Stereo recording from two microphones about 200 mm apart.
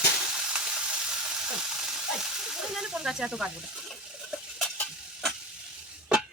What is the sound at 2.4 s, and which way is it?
Water, 5° right (ahead or behind).